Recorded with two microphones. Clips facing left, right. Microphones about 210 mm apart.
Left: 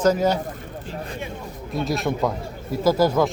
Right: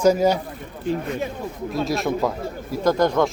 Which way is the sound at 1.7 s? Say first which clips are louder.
Right 1 dB; centre (ahead or behind).